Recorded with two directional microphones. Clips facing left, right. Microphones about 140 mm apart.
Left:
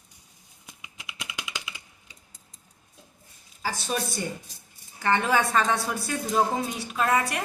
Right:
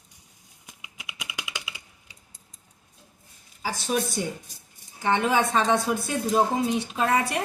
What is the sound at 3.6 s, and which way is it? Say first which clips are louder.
A woman's voice: right 3 dB; 15° right (ahead or behind).